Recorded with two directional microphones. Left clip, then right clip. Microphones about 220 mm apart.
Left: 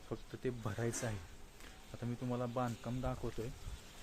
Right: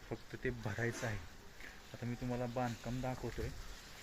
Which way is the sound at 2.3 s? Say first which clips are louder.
Even; 10° left (ahead or behind).